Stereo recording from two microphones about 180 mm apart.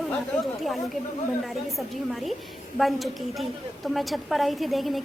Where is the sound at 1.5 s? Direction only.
Centre (ahead or behind).